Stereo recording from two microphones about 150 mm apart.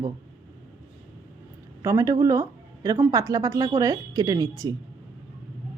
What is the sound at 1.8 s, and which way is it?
A woman's voice, 20° right (ahead or behind).